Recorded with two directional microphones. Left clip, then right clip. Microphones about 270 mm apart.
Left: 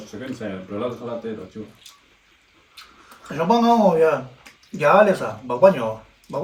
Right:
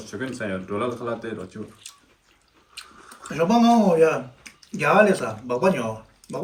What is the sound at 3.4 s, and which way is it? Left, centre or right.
Speech, centre.